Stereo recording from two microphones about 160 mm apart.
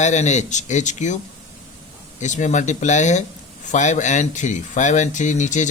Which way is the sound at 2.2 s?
50° left (ahead or behind).